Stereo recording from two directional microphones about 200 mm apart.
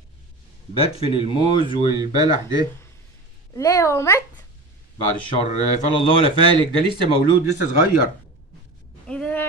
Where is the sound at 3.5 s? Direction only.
15° left (ahead or behind).